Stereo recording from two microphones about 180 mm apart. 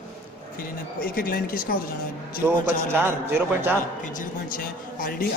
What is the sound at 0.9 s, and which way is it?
Speech, 55° left (ahead or behind).